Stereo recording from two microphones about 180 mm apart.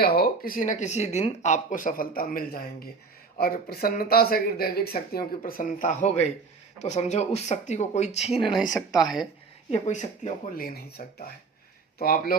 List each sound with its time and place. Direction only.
0.0 s speech: 60° left (ahead or behind)
5.4 s speech: 45° left (ahead or behind); by 8.5 s 30° left (ahead or behind)
9.7 s speech: 40° left (ahead or behind); by 12.4 s 55° left (ahead or behind)